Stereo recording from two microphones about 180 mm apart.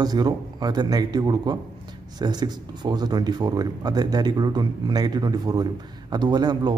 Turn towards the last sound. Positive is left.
turn(degrees=-25)  # may be behind; listen again after turning